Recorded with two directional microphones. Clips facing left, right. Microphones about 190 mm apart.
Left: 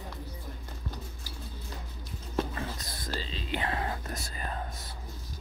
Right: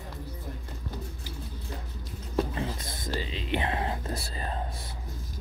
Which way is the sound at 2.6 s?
25° right (ahead or behind).